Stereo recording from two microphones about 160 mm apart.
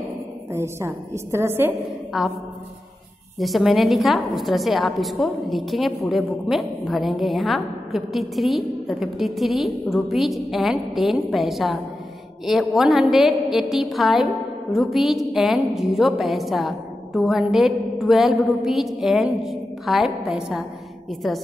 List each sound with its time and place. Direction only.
0.5 s a woman's voice: 15° right (ahead or behind)
2.1 s a woman's voice: centre (ahead or behind)
3.3 s a woman's voice: centre (ahead or behind)